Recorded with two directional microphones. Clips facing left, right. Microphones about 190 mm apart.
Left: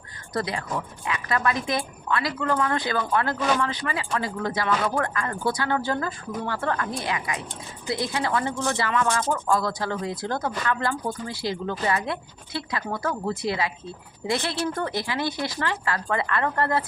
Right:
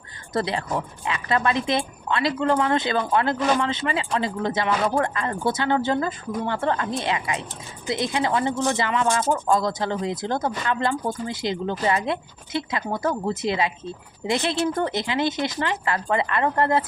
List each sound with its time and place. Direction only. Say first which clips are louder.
0.3 s a woman's voice: right 3 dB; 25° right (ahead or behind)